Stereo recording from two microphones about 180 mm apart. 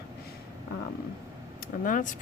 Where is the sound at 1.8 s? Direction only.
45° left (ahead or behind).